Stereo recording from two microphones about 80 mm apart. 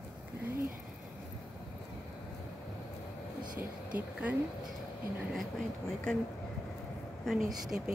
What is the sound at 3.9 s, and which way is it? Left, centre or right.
Speech, centre.